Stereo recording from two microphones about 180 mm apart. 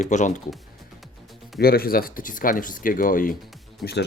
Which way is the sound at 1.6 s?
55° left (ahead or behind).